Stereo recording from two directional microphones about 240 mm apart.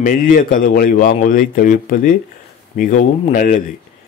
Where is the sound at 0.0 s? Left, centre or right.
Left.